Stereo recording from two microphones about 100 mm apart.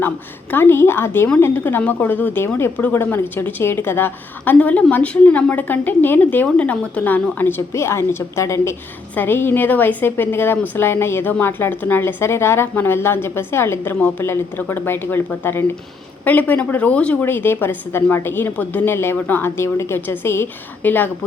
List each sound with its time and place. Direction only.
0.5 s a woman's voice: 25° left (ahead or behind)